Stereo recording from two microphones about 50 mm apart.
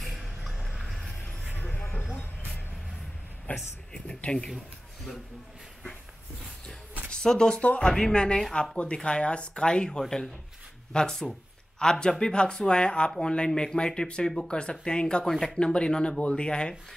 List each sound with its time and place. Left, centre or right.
0.0 s music: centre
3.5 s speech: left
4.2 s speech: centre
7.1 s speech: centre